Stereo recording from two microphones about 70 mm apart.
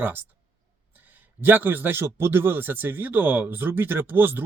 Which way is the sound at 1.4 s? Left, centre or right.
Right.